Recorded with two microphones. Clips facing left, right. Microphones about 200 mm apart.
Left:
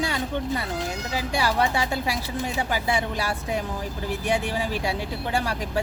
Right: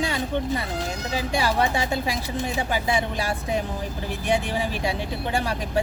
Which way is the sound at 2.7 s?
20° right (ahead or behind).